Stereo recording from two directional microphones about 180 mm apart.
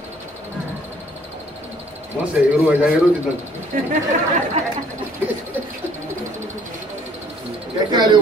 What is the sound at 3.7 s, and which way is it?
Speech, 50° right (ahead or behind).